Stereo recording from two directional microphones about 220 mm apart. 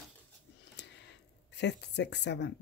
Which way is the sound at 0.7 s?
50° left (ahead or behind).